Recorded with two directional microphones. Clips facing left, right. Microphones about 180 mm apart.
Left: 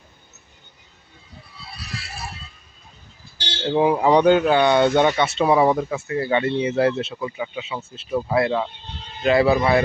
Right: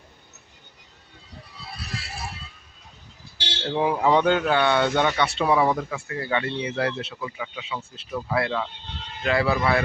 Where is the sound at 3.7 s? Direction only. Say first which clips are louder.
Left 4 dB; 15° left (ahead or behind).